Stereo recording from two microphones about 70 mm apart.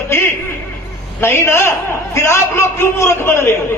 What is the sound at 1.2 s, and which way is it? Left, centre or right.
A man's voice, left.